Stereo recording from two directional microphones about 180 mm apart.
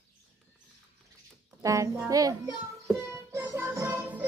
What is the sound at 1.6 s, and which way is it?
Speech, 15° right (ahead or behind).